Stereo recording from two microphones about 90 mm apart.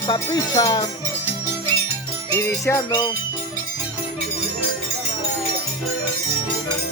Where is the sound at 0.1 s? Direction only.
45° left (ahead or behind).